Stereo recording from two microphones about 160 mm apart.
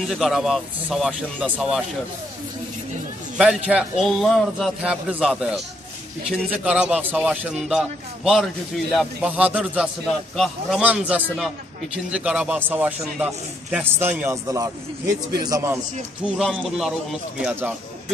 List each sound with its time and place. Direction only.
0.0 s speech: centre (ahead or behind)
3.3 s a man's voice: 5° right (ahead or behind)
16.3 s speech: centre (ahead or behind)